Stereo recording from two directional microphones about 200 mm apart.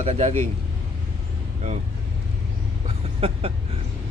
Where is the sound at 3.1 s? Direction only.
30° right (ahead or behind).